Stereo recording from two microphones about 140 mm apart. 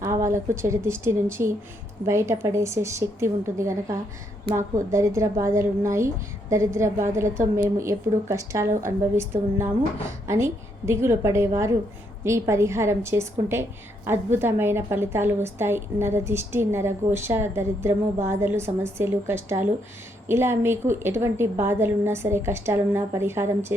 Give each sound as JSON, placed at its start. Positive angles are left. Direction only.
{"t": 0.0, "sound": "a woman's voice", "side_deg": -20}
{"t": 4.9, "sound": "a woman's voice", "side_deg": -20}